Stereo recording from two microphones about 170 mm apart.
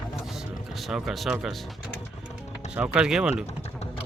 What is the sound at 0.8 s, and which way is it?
Speech, centre (ahead or behind).